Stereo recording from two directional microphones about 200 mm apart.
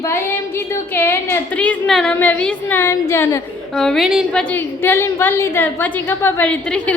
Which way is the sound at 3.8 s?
Centre (ahead or behind).